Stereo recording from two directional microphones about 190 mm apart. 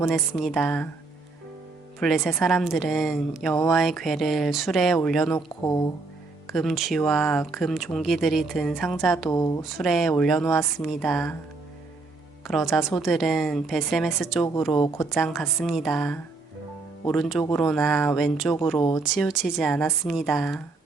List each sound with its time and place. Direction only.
0.1 s speech: centre (ahead or behind)
2.0 s speech: centre (ahead or behind)
5.6 s speech: 20° left (ahead or behind)
6.5 s speech: centre (ahead or behind)
9.3 s speech: 15° left (ahead or behind)
9.6 s speech: centre (ahead or behind)
12.5 s speech: centre (ahead or behind)
14.7 s speech: 20° left (ahead or behind)
15.1 s speech: centre (ahead or behind)
18.8 s speech: 20° left (ahead or behind)
19.0 s speech: 5° right (ahead or behind)